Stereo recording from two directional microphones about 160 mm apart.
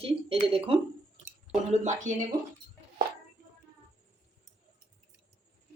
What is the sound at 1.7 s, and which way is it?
Speech, 50° right (ahead or behind).